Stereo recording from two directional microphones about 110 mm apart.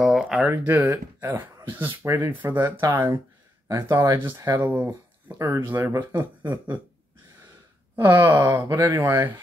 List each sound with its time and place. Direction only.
0.0 s a sound: 5° right (ahead or behind)
0.5 s speech: 20° right (ahead or behind)
6.1 s speech: 20° right (ahead or behind)
7.9 s speech: 20° right (ahead or behind)